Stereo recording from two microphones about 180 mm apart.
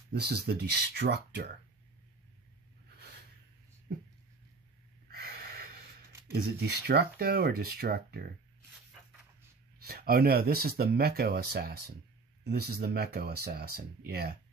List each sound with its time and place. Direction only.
0.1 s speech: 65° right (ahead or behind)
6.3 s speech: 65° right (ahead or behind)
9.8 s speech: 60° right (ahead or behind)